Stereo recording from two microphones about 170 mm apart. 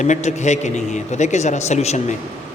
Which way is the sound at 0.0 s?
45° left (ahead or behind).